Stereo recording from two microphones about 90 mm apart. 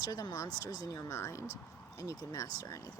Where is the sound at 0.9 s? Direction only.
35° left (ahead or behind).